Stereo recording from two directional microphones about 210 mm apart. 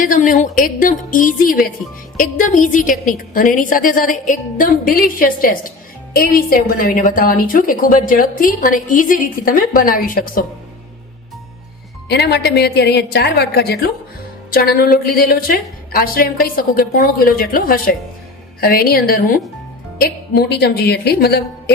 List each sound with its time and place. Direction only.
0.0 s a woman's voice: 40° left (ahead or behind)
12.0 s a woman's voice: 50° left (ahead or behind)